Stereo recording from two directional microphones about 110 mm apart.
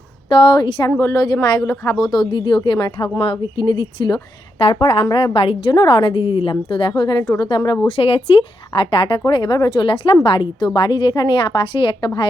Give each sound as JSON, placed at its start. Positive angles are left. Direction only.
{"t": 0.3, "sound": "a woman's voice", "side_deg": 45}
{"t": 0.9, "sound": "a woman's voice", "side_deg": 25}
{"t": 2.3, "sound": "a woman's voice", "side_deg": 45}
{"t": 5.7, "sound": "a woman's voice", "side_deg": 45}
{"t": 7.9, "sound": "a woman's voice", "side_deg": 55}